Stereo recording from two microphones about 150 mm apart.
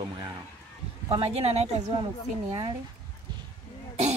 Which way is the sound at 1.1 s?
45° right (ahead or behind).